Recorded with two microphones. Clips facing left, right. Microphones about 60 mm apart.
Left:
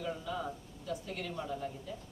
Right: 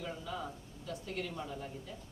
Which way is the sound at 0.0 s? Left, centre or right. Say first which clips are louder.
Left 3 dB; centre.